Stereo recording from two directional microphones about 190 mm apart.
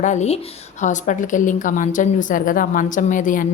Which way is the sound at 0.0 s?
40° left (ahead or behind).